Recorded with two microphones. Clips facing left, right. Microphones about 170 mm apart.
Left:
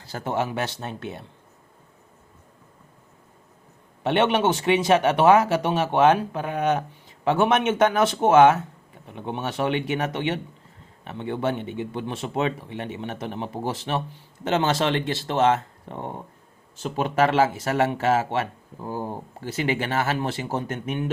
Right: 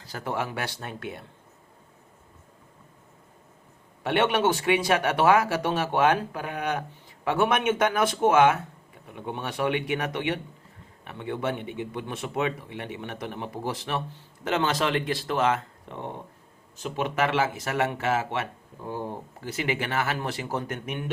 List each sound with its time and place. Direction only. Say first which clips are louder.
0.0 s speech: left 4 dB; 30° left (ahead or behind)
4.0 s speech: left 3 dB; 25° left (ahead or behind)
17.0 s speech: left 5 dB; 35° left (ahead or behind)